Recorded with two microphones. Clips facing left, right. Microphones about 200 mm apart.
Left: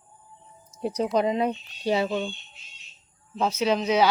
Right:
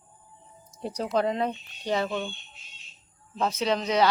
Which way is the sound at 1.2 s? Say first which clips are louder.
Left 1 dB; 10° left (ahead or behind).